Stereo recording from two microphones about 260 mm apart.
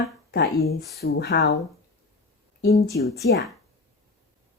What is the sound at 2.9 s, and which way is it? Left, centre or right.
Speech, left.